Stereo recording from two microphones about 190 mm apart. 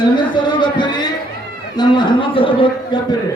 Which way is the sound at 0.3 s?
25° left (ahead or behind).